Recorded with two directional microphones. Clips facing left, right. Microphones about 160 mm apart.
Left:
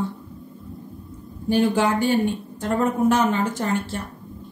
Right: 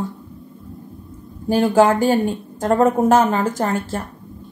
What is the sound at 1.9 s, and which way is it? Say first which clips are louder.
Speech: right 3 dB; 45° right (ahead or behind).